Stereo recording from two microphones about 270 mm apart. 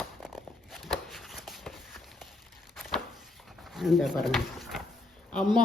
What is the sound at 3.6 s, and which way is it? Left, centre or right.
Speech, centre.